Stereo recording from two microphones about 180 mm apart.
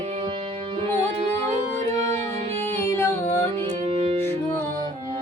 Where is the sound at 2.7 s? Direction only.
15° left (ahead or behind).